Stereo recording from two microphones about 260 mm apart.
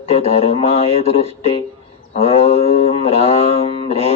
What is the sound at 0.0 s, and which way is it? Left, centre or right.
Speech, left.